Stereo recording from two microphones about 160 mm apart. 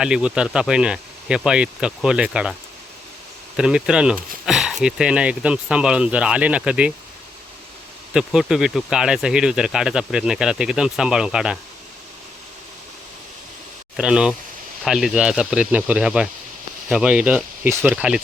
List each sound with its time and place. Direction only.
0.0 s speech: 5° right (ahead or behind)
3.6 s speech: 5° right (ahead or behind)
8.1 s speech: 5° right (ahead or behind)
13.9 s speech: 5° right (ahead or behind)